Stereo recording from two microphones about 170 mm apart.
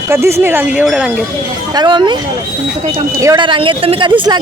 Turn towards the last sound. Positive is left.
turn(degrees=-25)  # may be behind; listen again after turning